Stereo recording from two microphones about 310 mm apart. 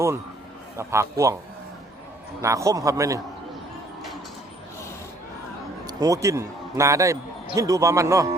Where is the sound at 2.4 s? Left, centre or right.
Centre.